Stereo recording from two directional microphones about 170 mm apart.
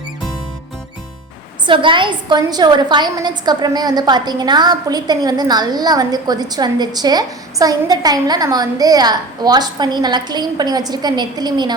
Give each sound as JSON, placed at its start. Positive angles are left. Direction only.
{"t": 1.6, "sound": "a woman's voice", "side_deg": -30}